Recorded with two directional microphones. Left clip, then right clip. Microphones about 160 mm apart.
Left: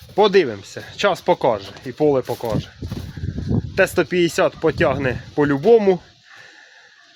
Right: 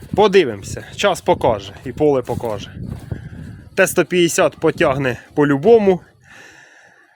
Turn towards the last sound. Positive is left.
turn(degrees=-35)  # may be behind; listen again after turning